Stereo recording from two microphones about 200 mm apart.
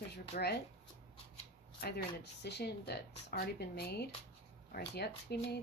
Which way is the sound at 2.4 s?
55° left (ahead or behind).